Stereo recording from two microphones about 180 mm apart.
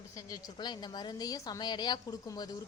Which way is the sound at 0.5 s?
25° left (ahead or behind).